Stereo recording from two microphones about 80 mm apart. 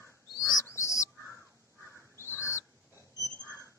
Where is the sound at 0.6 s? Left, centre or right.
Left.